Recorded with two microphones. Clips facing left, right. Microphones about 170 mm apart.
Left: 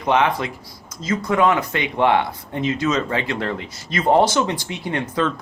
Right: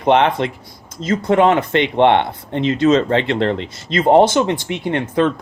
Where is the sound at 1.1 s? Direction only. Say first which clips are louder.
Right 4 dB; 25° right (ahead or behind).